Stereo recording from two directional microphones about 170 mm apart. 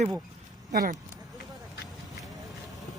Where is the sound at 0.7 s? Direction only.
55° right (ahead or behind).